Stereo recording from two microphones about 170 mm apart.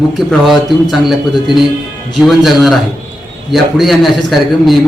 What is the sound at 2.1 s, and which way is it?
A man's voice, centre (ahead or behind).